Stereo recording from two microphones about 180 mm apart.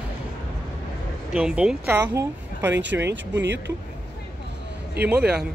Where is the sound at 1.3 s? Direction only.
5° right (ahead or behind).